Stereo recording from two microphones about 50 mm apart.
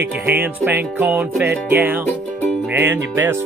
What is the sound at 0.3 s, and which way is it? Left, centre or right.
Music, right.